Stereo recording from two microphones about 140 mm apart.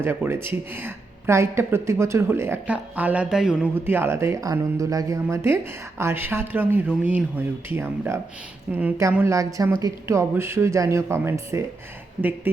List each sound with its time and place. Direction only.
0.0 s speech: 15° right (ahead or behind)
9.1 s speech: 20° right (ahead or behind)